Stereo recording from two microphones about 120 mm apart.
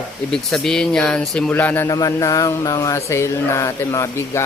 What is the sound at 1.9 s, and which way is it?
Speech, 30° left (ahead or behind).